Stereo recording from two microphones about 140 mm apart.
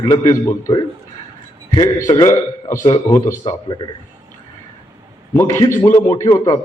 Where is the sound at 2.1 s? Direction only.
25° left (ahead or behind).